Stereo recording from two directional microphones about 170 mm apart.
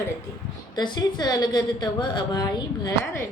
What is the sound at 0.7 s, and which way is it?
A woman's voice, 25° left (ahead or behind).